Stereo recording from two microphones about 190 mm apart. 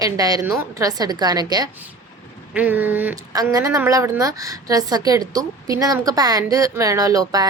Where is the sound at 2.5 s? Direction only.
10° right (ahead or behind).